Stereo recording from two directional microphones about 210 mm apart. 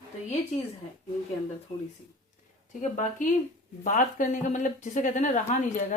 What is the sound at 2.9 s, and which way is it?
Speech, 35° left (ahead or behind).